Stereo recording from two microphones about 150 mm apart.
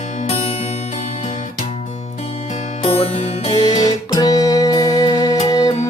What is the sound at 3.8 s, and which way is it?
Music, 25° left (ahead or behind).